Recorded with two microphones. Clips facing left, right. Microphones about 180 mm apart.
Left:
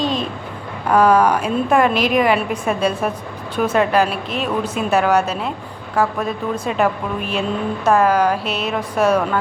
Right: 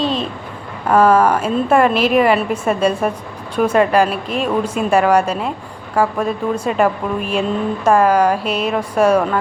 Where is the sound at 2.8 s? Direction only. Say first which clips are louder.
Right 3 dB; 10° left (ahead or behind).